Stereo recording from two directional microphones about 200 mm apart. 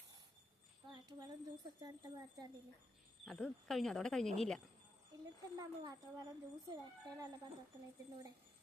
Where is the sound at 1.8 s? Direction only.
20° right (ahead or behind).